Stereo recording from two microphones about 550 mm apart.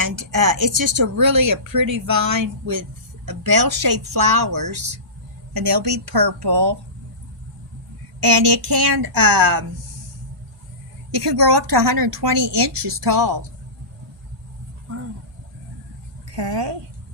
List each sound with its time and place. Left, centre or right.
0.4 s speech: right
8.2 s speech: right
11.1 s a woman's voice: right
16.3 s a woman's voice: right